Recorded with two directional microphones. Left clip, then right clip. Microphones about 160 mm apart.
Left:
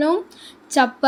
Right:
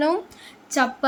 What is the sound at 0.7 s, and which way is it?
Speech, 15° left (ahead or behind).